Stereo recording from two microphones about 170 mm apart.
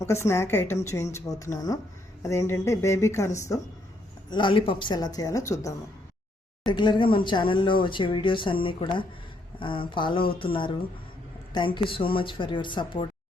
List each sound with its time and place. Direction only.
0.0 s speech: 15° left (ahead or behind)
4.3 s speech: 30° left (ahead or behind)